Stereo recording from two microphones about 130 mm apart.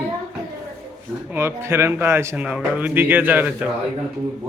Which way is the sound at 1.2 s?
20° right (ahead or behind).